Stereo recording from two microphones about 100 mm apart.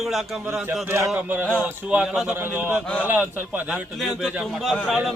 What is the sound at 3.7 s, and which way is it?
Speech, centre (ahead or behind).